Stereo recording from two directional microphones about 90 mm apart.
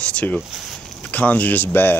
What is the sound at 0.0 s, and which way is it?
Speech, 15° left (ahead or behind).